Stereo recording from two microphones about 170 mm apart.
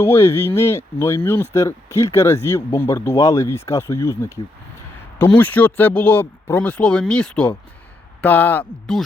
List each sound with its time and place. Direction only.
0.0 s speech: 15° left (ahead or behind)